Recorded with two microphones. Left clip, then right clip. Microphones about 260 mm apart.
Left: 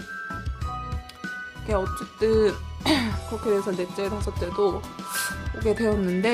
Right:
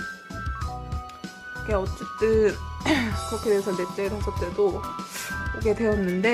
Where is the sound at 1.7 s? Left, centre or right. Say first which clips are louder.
Left 1 dB; centre.